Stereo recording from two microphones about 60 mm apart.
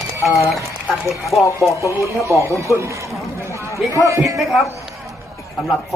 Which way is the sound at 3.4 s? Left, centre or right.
Right.